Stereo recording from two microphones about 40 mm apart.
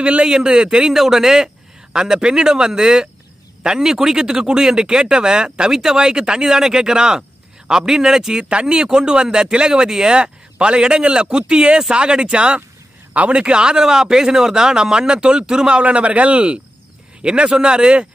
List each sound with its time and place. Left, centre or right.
0.0 s speech: right
0.9 s speech: centre
1.9 s speech: right
13.1 s a man's voice: right
13.4 s speech: right
15.8 s a man's voice: right